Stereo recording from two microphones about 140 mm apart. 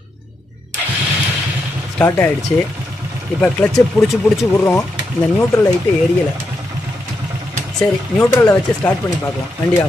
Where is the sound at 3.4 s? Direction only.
5° left (ahead or behind).